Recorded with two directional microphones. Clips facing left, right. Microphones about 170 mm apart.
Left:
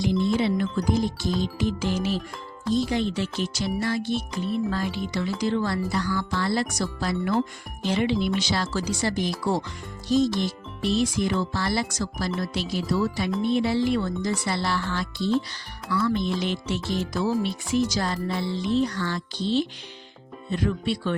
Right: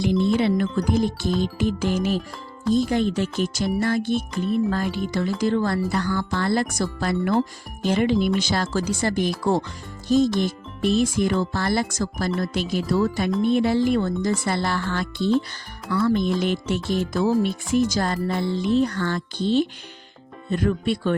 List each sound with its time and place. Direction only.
0.3 s speech: 55° right (ahead or behind)